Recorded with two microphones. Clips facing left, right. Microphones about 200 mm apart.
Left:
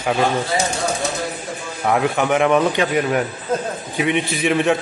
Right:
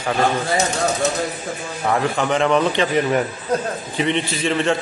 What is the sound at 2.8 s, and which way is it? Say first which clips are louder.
A man's voice: even; centre (ahead or behind).